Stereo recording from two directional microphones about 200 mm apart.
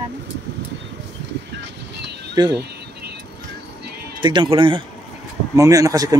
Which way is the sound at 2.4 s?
20° right (ahead or behind).